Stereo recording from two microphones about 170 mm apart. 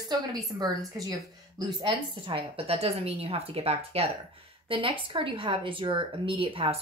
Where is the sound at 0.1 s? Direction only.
20° right (ahead or behind).